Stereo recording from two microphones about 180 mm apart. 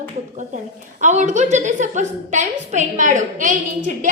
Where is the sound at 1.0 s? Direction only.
40° right (ahead or behind).